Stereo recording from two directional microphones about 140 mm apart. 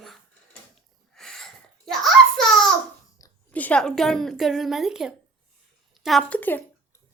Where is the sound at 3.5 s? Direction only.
10° left (ahead or behind).